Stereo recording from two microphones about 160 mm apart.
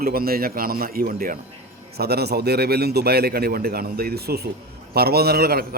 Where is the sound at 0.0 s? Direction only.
70° right (ahead or behind).